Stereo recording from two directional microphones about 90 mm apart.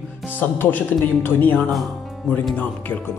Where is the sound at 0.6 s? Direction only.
20° left (ahead or behind).